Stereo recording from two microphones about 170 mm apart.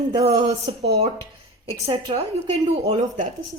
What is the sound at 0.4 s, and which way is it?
Speech, 40° right (ahead or behind).